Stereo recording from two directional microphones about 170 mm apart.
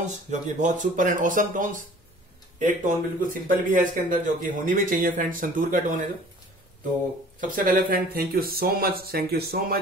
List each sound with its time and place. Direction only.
0.3 s speech: 45° right (ahead or behind)
7.3 s speech: 55° right (ahead or behind)